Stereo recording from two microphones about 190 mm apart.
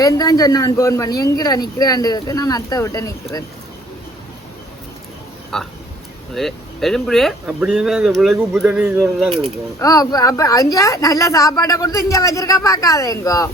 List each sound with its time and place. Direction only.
0.0 s speech: 20° left (ahead or behind)
5.5 s speech: centre (ahead or behind)
9.8 s a woman's voice: 20° left (ahead or behind)